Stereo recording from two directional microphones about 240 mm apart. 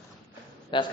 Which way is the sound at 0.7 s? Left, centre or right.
Centre.